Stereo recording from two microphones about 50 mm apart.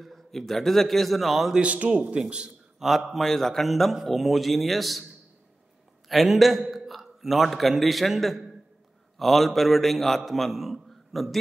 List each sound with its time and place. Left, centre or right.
0.0 s a man's voice: centre
1.5 s a man's voice: right
3.1 s a man's voice: centre
6.0 s a man's voice: centre